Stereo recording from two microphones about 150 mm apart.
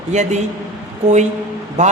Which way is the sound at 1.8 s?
50° right (ahead or behind).